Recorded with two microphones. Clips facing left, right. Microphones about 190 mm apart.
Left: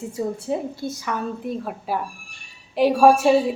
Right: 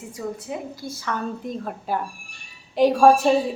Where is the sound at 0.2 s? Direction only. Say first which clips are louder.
Left 5 dB; 30° left (ahead or behind).